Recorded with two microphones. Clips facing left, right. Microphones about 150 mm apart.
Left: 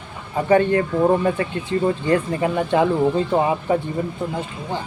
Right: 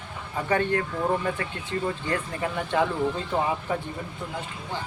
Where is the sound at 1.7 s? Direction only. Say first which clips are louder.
Left 9 dB; 20° left (ahead or behind).